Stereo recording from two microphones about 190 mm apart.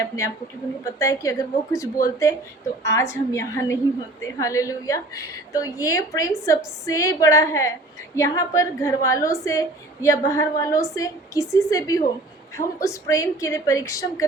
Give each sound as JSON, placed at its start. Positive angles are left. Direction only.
{"t": 0.9, "sound": "a woman's voice", "side_deg": 15}